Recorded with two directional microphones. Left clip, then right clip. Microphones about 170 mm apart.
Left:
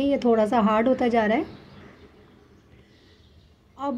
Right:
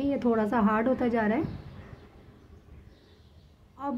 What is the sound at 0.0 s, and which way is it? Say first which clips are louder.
Speech: left 6 dB; 20° left (ahead or behind).